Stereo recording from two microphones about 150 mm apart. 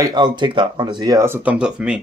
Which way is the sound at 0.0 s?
30° right (ahead or behind).